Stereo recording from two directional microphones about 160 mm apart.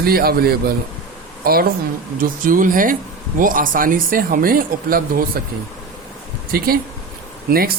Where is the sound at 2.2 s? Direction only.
60° right (ahead or behind).